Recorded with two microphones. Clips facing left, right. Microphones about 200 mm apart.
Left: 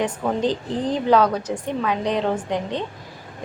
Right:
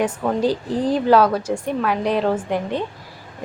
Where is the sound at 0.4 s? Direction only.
10° right (ahead or behind).